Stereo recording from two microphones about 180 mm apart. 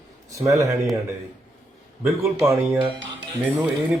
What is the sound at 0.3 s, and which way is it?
Speech, 15° right (ahead or behind).